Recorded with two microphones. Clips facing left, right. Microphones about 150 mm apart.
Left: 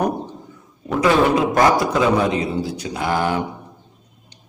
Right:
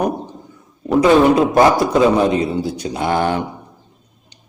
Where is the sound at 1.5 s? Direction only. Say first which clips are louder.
Right 4 dB; 25° right (ahead or behind).